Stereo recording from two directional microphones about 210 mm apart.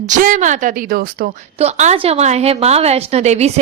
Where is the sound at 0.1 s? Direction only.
35° right (ahead or behind).